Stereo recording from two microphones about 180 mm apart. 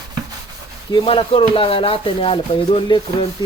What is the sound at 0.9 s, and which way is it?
Rub, 30° left (ahead or behind).